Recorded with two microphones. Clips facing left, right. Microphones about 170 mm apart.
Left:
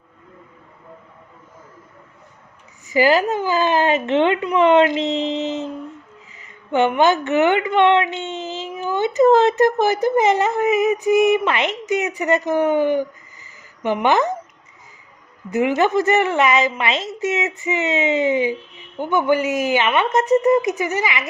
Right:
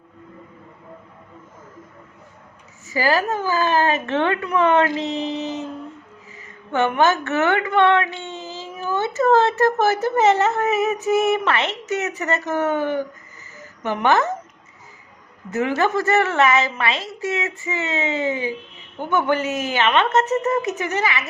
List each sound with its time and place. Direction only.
2.8 s a woman's voice: 20° left (ahead or behind)
15.4 s speech: 15° left (ahead or behind)